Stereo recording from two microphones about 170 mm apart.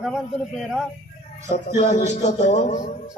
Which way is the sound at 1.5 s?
45° left (ahead or behind).